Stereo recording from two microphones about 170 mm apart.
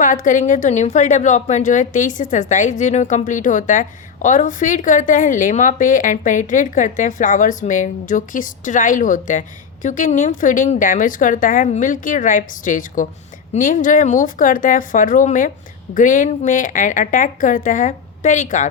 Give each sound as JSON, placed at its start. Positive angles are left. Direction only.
{"t": 0.0, "sound": "a woman's voice", "side_deg": 50}